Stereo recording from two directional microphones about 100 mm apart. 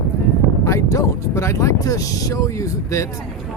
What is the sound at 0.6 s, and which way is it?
Speech, 30° left (ahead or behind).